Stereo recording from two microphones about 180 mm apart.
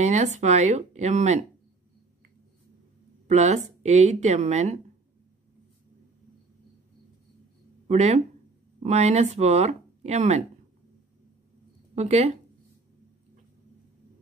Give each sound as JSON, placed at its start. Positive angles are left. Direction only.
{"t": 0.0, "sound": "a woman's voice", "side_deg": -40}
{"t": 3.3, "sound": "a woman's voice", "side_deg": -40}
{"t": 7.9, "sound": "a woman's voice", "side_deg": -40}
{"t": 11.9, "sound": "a woman's voice", "side_deg": -40}